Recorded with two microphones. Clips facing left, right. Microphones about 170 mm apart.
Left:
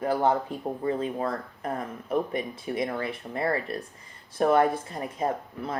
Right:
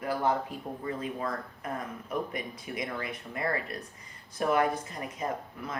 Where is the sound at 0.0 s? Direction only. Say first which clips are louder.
Left 5 dB; 30° left (ahead or behind).